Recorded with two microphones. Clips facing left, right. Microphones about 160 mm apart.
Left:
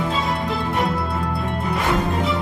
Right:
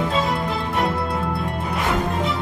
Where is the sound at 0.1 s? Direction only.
Centre (ahead or behind).